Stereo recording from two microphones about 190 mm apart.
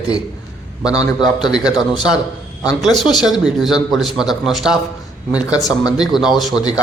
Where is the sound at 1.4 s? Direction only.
20° left (ahead or behind).